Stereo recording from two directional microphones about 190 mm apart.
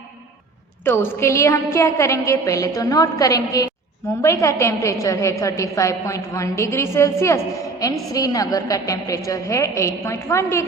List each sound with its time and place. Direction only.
0.9 s a woman's voice: 15° left (ahead or behind)